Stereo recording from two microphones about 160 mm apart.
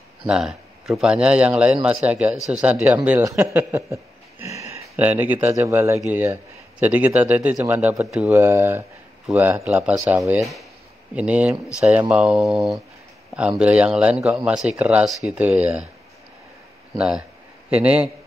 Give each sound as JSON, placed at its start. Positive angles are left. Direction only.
{"t": 0.3, "sound": "speech", "side_deg": 0}
{"t": 10.4, "sound": "speech", "side_deg": 0}
{"t": 16.9, "sound": "speech", "side_deg": -5}